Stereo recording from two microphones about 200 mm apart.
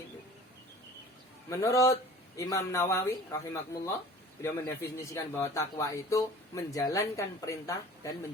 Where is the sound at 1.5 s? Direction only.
15° left (ahead or behind).